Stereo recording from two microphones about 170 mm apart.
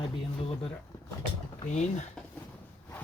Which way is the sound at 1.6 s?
45° left (ahead or behind).